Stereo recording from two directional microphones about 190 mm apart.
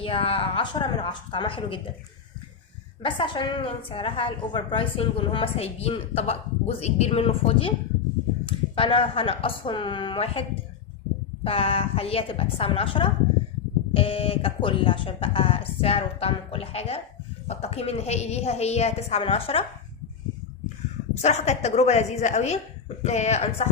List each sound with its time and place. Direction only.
0.0 s a woman's voice: 30° left (ahead or behind)
3.0 s a woman's voice: 25° left (ahead or behind)
11.4 s a woman's voice: 30° left (ahead or behind)
21.2 s a woman's voice: 35° left (ahead or behind)